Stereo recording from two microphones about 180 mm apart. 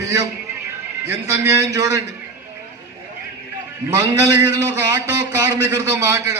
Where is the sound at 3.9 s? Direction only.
15° right (ahead or behind).